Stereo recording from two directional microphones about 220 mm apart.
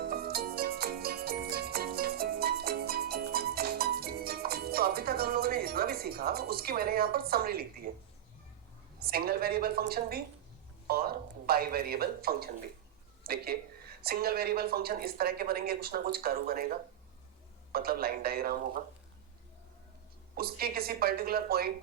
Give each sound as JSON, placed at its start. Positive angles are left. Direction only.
{"t": 0.0, "sound": "music", "side_deg": -45}
{"t": 7.9, "sound": "speech", "side_deg": -40}
{"t": 20.3, "sound": "speech", "side_deg": -45}